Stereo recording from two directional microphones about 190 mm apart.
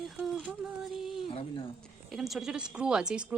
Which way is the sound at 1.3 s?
25° left (ahead or behind).